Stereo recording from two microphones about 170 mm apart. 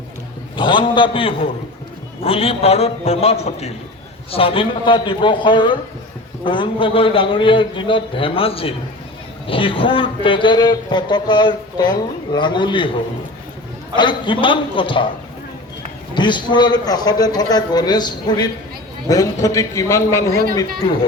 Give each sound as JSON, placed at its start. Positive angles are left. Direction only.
{"t": 0.5, "sound": "a man's voice", "side_deg": 30}
{"t": 13.9, "sound": "a man's voice", "side_deg": 25}
{"t": 16.1, "sound": "a man's voice", "side_deg": 25}